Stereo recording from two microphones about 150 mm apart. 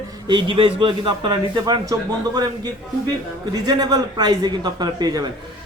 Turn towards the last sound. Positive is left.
turn(degrees=-25)  # may be behind; listen again after turning